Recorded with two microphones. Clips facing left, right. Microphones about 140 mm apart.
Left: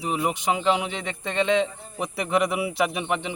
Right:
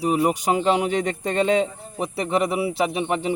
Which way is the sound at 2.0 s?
30° right (ahead or behind).